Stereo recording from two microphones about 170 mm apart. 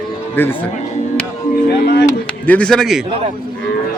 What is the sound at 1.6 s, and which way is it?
Speech, 75° left (ahead or behind).